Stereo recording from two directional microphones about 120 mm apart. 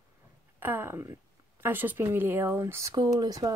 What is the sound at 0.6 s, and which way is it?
A woman's voice, 20° right (ahead or behind).